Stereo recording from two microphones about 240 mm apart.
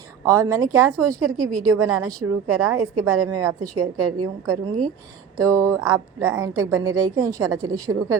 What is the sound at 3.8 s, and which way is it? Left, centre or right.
Speech, right.